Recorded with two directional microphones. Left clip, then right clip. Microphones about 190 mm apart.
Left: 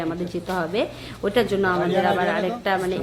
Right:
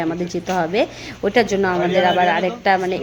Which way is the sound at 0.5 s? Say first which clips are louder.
Right 6 dB; 25° right (ahead or behind).